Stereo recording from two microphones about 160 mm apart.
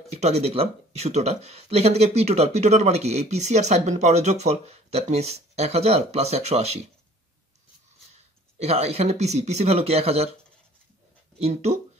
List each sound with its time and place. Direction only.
0.1 s speech: 40° right (ahead or behind)
8.5 s speech: 40° right (ahead or behind)
11.3 s speech: 40° right (ahead or behind)